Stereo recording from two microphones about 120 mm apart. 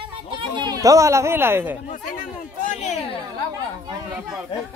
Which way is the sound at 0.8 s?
25° right (ahead or behind).